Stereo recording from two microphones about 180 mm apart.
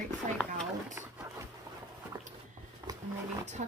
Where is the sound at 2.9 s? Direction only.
20° right (ahead or behind).